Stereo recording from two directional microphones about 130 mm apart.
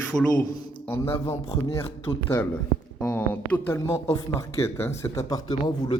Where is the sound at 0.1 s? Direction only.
Centre (ahead or behind).